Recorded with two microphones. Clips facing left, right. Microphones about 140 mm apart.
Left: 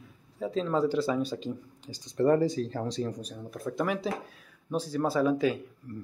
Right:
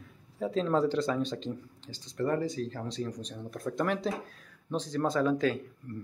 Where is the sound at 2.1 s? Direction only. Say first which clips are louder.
Left 6 dB; 30° left (ahead or behind).